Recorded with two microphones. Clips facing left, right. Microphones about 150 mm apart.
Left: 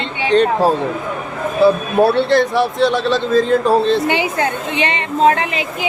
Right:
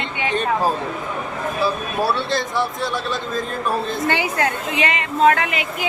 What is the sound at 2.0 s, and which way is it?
A man's voice, 60° left (ahead or behind).